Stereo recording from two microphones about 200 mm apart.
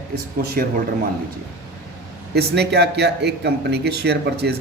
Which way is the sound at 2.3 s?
55° right (ahead or behind).